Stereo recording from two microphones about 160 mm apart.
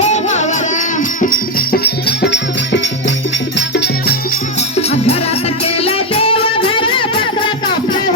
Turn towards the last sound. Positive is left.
turn(degrees=35)  # may be behind; listen again after turning